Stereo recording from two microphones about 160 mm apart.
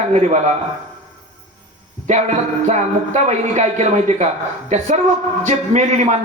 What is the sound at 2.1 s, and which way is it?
A man's voice, 45° right (ahead or behind).